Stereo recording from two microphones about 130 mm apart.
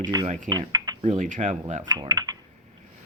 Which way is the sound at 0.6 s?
60° right (ahead or behind).